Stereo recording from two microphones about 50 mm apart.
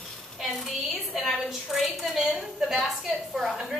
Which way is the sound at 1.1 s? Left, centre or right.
Centre.